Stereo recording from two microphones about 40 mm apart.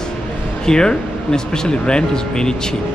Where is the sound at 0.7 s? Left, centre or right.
Centre.